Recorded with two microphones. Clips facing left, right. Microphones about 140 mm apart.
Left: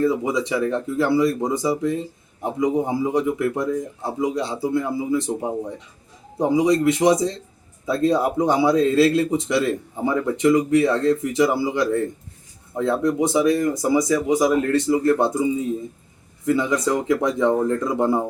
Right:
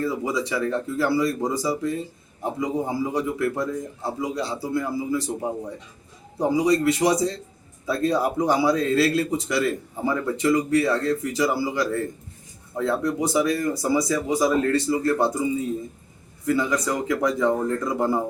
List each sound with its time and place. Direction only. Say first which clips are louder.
0.0 s speech: left 5 dB; 20° left (ahead or behind)
16.5 s speech: left 3 dB; 20° left (ahead or behind)